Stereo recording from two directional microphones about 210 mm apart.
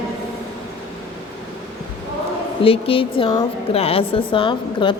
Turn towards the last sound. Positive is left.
turn(degrees=25)  # may be behind; listen again after turning